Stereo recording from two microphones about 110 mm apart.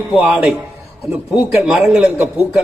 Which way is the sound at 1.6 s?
5° right (ahead or behind).